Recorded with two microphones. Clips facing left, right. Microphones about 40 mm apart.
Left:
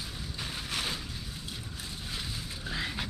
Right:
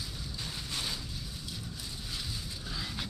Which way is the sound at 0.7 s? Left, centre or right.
Left.